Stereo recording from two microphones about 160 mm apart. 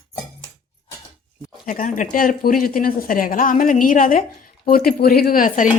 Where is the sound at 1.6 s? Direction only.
55° left (ahead or behind).